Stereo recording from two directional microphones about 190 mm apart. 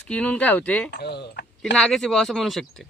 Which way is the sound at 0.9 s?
60° left (ahead or behind).